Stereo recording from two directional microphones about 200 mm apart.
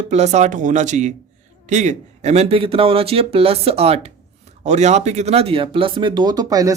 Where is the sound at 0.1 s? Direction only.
35° right (ahead or behind).